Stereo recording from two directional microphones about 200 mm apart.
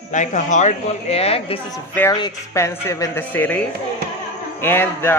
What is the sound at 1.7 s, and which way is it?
Speech, 15° left (ahead or behind).